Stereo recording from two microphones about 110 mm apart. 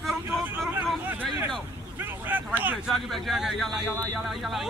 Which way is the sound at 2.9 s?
Centre (ahead or behind).